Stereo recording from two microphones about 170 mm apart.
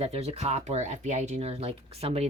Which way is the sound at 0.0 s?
35° right (ahead or behind).